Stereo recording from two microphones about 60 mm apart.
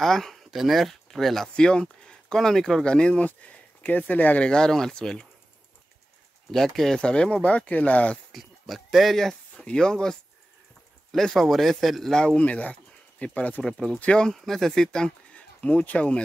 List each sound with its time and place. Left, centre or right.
0.0 s speech: centre
3.3 s speech: left
4.5 s speech: centre
6.5 s speech: centre; by 8.2 s left
8.3 s speech: centre; by 16.2 s left